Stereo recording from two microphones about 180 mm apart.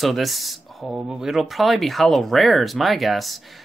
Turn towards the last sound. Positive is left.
turn(degrees=0)  # may be behind; listen again after turning